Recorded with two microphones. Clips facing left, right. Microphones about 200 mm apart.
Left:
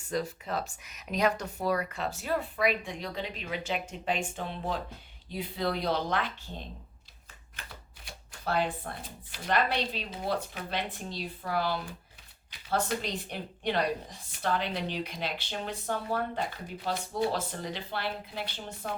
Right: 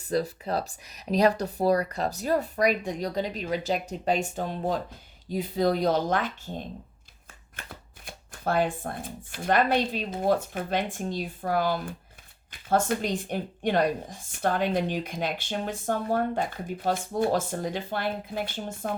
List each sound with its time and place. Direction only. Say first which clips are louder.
0.1 s a woman's voice: right 5 dB; 35° right (ahead or behind)